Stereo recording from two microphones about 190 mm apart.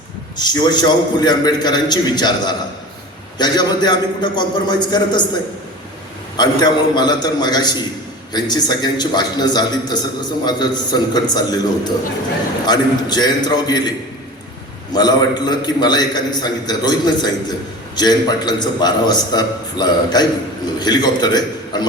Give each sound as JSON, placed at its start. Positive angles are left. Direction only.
{"t": 0.3, "sound": "a man's voice", "side_deg": 20}
{"t": 6.3, "sound": "a man's voice", "side_deg": 20}
{"t": 14.9, "sound": "a man's voice", "side_deg": 20}